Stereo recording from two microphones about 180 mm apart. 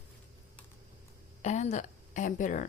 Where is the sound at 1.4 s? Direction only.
40° left (ahead or behind).